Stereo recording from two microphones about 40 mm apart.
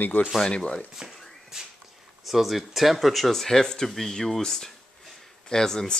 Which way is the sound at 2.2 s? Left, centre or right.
Centre.